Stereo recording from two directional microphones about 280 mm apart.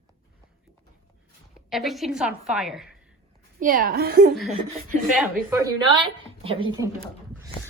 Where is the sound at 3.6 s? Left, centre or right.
Right.